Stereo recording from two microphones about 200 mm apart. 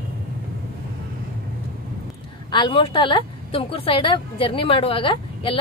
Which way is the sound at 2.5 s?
25° left (ahead or behind).